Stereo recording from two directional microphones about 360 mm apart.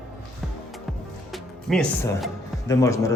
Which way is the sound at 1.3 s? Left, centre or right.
Centre.